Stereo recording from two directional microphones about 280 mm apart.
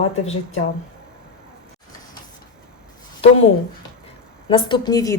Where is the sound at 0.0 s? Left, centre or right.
Left.